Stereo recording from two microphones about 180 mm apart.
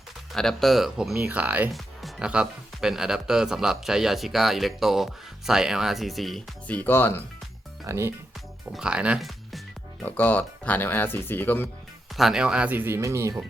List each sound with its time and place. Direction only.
0.3 s speech: centre (ahead or behind)
7.9 s speech: 15° right (ahead or behind)
8.7 s speech: 5° right (ahead or behind)
10.0 s speech: 10° left (ahead or behind)
12.1 s speech: centre (ahead or behind)